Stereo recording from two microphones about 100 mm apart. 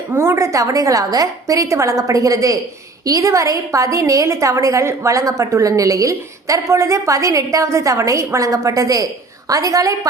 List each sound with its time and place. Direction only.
0.1 s a woman's voice: 25° right (ahead or behind)